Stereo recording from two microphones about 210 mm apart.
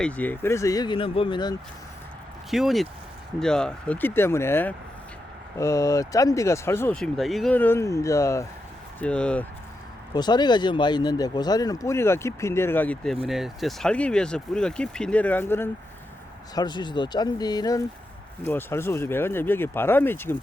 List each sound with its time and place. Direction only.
0.0 s speech: 5° left (ahead or behind)
2.5 s speech: centre (ahead or behind)
10.2 s speech: 20° left (ahead or behind)